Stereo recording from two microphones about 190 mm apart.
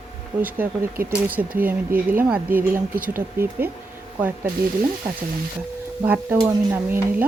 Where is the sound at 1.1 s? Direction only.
10° right (ahead or behind).